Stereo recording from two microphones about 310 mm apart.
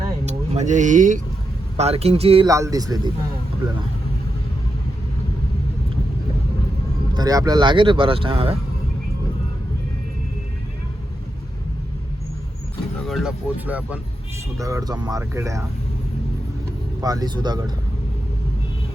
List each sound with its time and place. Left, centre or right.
0.3 s speech: right
7.1 s speech: centre
13.1 s speech: centre
17.0 s speech: centre